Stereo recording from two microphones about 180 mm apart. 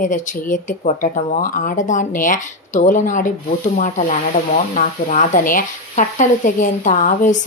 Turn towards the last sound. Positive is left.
turn(degrees=45)  # may be behind; listen again after turning